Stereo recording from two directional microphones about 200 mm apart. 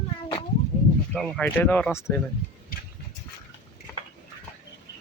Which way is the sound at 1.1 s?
5° left (ahead or behind).